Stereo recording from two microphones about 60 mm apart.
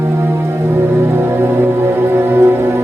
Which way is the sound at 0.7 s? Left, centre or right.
Right.